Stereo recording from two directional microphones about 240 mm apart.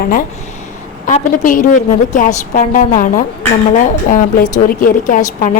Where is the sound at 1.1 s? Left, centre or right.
Left.